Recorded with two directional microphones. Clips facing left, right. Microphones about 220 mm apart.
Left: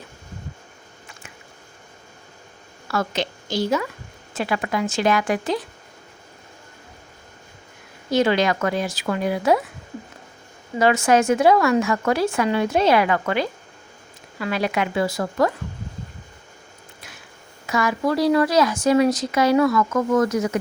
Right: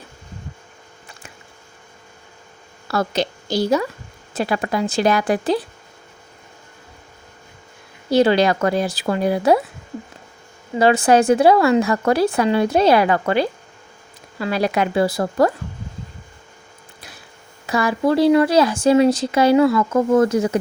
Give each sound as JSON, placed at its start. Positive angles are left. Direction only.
{"t": 2.8, "sound": "a woman's voice", "side_deg": -35}
{"t": 8.1, "sound": "speech", "side_deg": -35}
{"t": 10.8, "sound": "speech", "side_deg": -30}
{"t": 17.7, "sound": "a woman's voice", "side_deg": -35}